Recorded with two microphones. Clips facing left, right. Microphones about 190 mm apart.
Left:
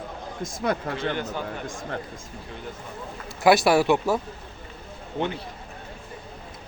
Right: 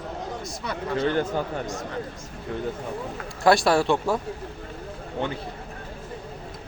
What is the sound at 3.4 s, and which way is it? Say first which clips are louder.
Speech: left 1 dB; 5° left (ahead or behind).